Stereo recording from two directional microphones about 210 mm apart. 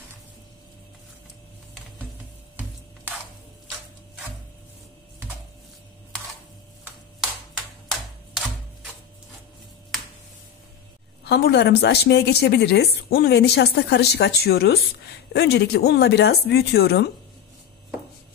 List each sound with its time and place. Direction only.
11.2 s speech: 50° left (ahead or behind)